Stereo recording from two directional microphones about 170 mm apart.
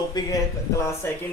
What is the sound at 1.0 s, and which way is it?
Speech, 15° left (ahead or behind).